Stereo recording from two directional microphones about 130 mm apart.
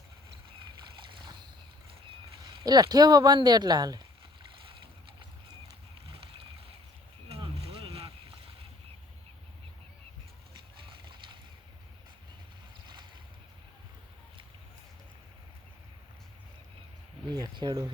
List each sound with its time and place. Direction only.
1.2 s boat: 35° right (ahead or behind)
2.6 s speech: 30° right (ahead or behind)
7.3 s vehicle: 50° right (ahead or behind)
17.3 s a sound: 35° right (ahead or behind)